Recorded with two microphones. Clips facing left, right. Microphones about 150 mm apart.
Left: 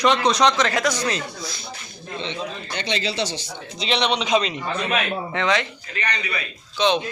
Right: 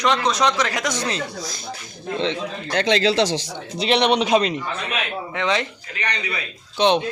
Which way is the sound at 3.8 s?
55° right (ahead or behind).